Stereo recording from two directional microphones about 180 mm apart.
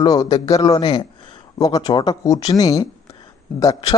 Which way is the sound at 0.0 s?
25° left (ahead or behind).